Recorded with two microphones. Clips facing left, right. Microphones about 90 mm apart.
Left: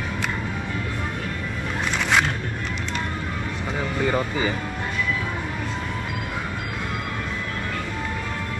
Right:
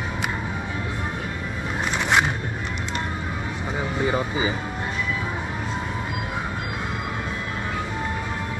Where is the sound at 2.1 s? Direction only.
10° right (ahead or behind).